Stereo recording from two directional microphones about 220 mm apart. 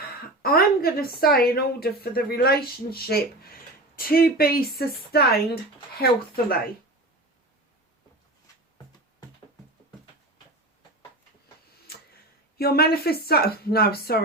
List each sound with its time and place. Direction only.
0.2 s a woman's voice: 45° left (ahead or behind)
12.5 s a woman's voice: 45° left (ahead or behind)